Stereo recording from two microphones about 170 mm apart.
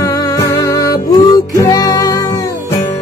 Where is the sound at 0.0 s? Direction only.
20° left (ahead or behind).